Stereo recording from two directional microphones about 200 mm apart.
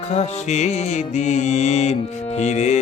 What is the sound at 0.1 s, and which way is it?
Mantra, 35° left (ahead or behind).